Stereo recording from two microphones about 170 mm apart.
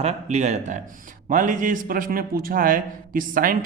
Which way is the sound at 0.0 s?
40° right (ahead or behind).